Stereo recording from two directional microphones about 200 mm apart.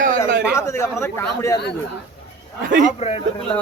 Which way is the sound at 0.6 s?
15° left (ahead or behind).